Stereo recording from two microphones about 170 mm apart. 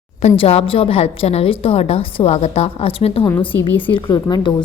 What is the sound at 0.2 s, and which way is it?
A woman's voice, 40° left (ahead or behind).